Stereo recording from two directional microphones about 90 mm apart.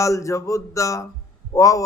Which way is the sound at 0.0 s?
35° left (ahead or behind).